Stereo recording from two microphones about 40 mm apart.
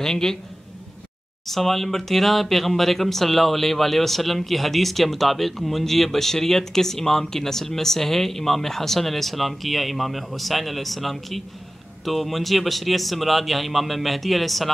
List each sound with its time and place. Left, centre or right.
0.0 s a man's voice: centre
1.5 s speech: centre